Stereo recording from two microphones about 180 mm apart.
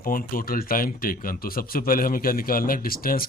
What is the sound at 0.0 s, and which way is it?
Speech, 50° left (ahead or behind).